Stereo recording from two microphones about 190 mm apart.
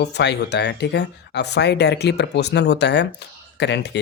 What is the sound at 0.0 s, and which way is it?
Speech, 65° left (ahead or behind).